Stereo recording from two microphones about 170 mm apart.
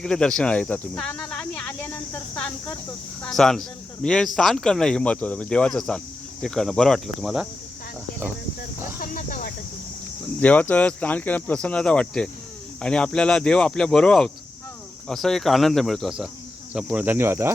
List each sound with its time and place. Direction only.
0.0 s speech: 5° left (ahead or behind)
3.2 s speech: 5° left (ahead or behind)
9.0 s cricket: 55° left (ahead or behind)
10.4 s speech: 10° left (ahead or behind); by 17.5 s 15° right (ahead or behind)